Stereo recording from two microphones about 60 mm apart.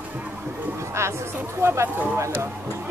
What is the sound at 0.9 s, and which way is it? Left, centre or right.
Speech, right.